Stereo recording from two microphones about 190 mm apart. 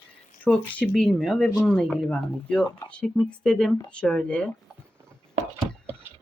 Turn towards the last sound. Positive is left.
turn(degrees=-10)  # may be behind; listen again after turning